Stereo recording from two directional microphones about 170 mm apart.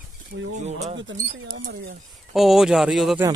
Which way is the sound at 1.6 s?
90° right.